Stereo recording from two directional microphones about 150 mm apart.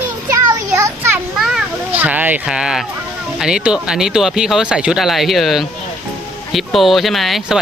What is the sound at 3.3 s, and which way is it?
Speech, 5° right (ahead or behind).